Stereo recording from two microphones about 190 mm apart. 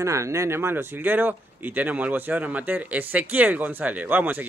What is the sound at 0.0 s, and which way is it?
Speech, 15° right (ahead or behind).